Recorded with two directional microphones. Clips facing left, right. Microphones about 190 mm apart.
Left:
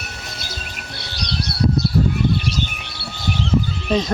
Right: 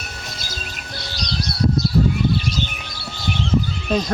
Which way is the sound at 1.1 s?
60° left (ahead or behind).